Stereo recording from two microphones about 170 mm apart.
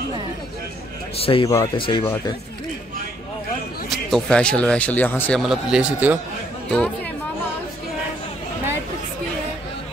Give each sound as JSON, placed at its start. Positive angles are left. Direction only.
{"t": 1.2, "sound": "a man's voice", "side_deg": 30}
{"t": 3.9, "sound": "speech", "side_deg": 5}
{"t": 5.4, "sound": "speech", "side_deg": -5}